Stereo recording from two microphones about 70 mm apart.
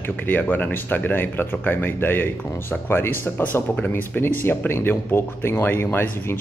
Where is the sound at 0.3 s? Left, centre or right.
Left.